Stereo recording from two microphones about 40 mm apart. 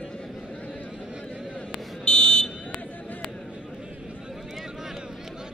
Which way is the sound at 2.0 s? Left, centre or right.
Centre.